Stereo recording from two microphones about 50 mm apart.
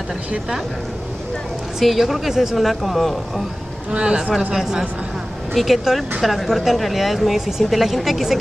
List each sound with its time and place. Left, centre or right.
1.8 s speech: centre
3.9 s a woman's voice: centre